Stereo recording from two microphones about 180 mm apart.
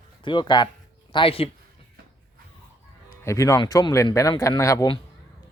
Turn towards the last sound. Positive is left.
turn(degrees=20)  # may be behind; listen again after turning